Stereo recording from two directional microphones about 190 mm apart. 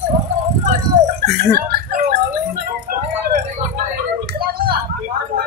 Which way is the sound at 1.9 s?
55° right (ahead or behind).